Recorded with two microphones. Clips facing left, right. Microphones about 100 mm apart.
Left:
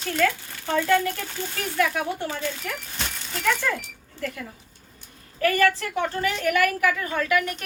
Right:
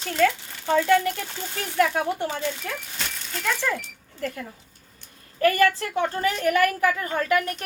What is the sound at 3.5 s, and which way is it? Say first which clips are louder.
Speech: left 2 dB; 5° right (ahead or behind).